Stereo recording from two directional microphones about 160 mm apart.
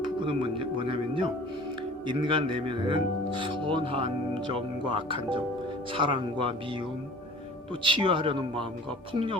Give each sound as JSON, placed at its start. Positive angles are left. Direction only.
{"t": 0.0, "sound": "speech", "side_deg": -30}